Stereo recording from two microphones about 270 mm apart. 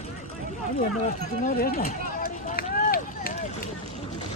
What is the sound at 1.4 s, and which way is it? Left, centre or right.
Run, left.